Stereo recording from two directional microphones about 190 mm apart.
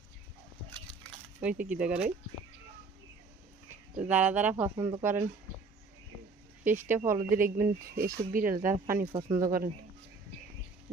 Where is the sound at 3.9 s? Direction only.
5° right (ahead or behind).